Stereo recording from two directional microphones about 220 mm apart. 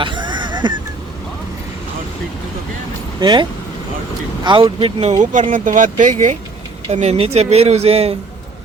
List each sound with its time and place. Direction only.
0.0 s a sound: 20° right (ahead or behind)
3.2 s speech: 20° right (ahead or behind)
4.4 s speech: 20° right (ahead or behind)